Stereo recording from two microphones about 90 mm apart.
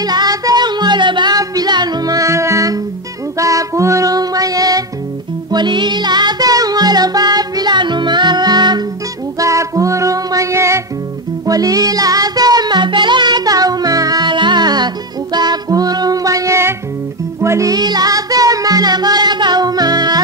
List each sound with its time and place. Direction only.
0.0 s music: 45° right (ahead or behind)
5.5 s music: 55° right (ahead or behind)
9.4 s music: 35° right (ahead or behind)